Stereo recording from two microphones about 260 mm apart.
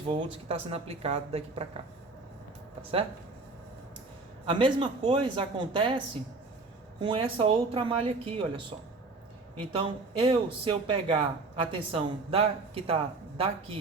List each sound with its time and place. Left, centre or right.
0.1 s speech: right
4.4 s speech: centre
7.0 s speech: centre